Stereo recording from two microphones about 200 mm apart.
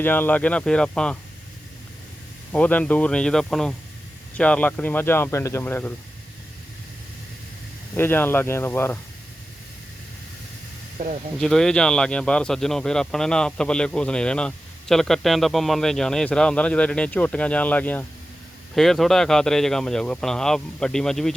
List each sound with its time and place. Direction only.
0.0 s speech: 10° left (ahead or behind)
2.5 s a man's voice: 10° left (ahead or behind)
7.9 s speech: 10° left (ahead or behind)
11.0 s speech: 40° right (ahead or behind)
11.3 s a man's voice: centre (ahead or behind)